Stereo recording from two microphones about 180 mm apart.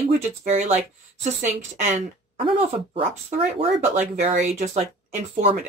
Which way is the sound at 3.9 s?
40° right (ahead or behind).